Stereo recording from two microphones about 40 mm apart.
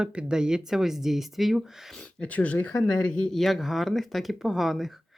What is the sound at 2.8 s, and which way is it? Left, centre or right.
Speech, left.